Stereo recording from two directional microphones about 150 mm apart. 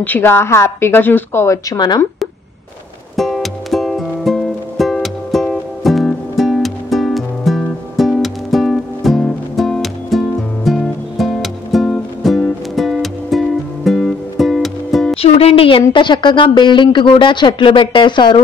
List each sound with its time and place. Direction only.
0.0 s a woman's voice: 15° left (ahead or behind)
3.2 s music: centre (ahead or behind)
15.1 s speech: 40° left (ahead or behind)